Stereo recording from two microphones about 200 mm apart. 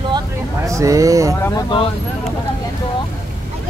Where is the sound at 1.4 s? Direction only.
20° left (ahead or behind).